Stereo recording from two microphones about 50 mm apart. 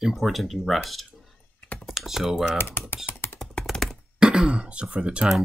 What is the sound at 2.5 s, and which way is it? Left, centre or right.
Speech, left.